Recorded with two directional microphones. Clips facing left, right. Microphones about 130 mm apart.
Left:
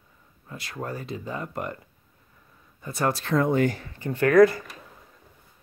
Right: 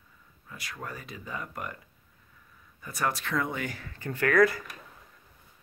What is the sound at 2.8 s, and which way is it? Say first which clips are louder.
Speech: left 5 dB; 30° left (ahead or behind).